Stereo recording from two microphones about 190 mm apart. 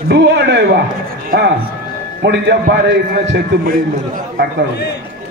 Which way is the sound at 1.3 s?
50° right (ahead or behind).